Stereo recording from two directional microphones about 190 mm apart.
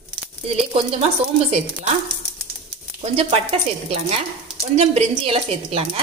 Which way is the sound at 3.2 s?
30° right (ahead or behind).